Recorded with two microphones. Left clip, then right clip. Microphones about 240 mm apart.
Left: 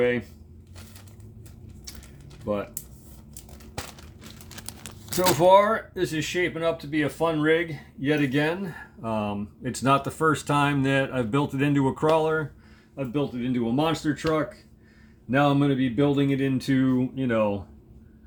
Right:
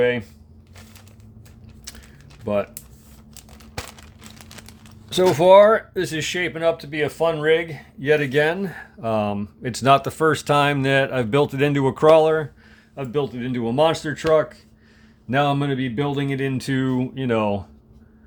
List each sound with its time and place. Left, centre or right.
0.0 s speech: right
2.5 s speech: right
3.6 s a sound: right
5.1 s speech: right
15.3 s speech: right